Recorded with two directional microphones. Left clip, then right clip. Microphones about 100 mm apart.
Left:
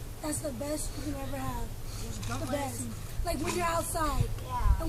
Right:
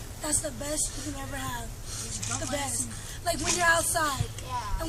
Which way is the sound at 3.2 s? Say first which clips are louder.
Right 6 dB; 30° left (ahead or behind).